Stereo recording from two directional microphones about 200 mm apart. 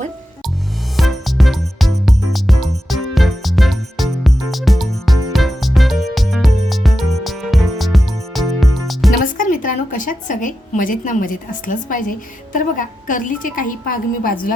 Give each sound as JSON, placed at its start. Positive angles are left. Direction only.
{"t": 0.9, "sound": "music", "side_deg": 0}
{"t": 9.2, "sound": "a woman's voice", "side_deg": 40}